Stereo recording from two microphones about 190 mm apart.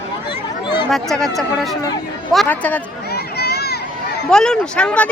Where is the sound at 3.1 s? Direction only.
55° left (ahead or behind).